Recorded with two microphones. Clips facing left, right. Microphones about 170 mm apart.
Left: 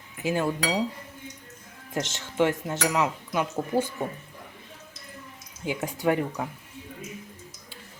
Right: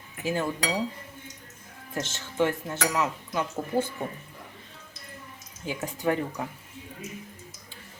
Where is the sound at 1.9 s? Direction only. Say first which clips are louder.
Left 3 dB; 15° left (ahead or behind).